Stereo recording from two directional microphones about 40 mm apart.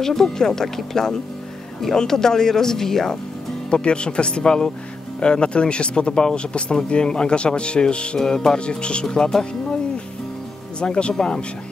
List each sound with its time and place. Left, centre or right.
0.0 s speech: centre
3.7 s speech: left
9.0 s speech: centre
10.8 s speech: left